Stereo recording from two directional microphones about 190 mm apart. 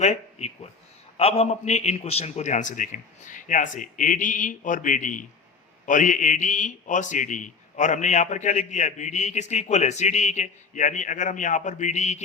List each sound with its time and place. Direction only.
0.0 s a man's voice: 35° left (ahead or behind)